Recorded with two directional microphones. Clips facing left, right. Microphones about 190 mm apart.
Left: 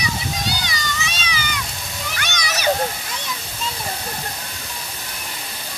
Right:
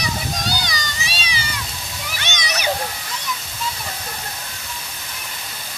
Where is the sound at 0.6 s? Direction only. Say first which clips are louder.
Left 1 dB; 35° right (ahead or behind).